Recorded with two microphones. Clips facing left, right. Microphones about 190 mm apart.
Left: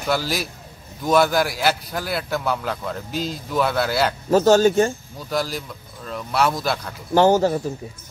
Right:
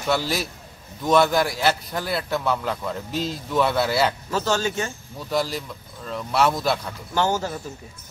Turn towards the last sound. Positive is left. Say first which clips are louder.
# left 8 dB
turn(degrees=35)  # may be behind; listen again after turning